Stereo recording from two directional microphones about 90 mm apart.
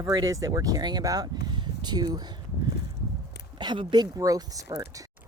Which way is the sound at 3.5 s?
55° right (ahead or behind).